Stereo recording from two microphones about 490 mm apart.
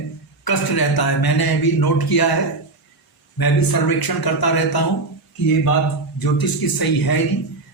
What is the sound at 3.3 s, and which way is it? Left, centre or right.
A man's voice, left.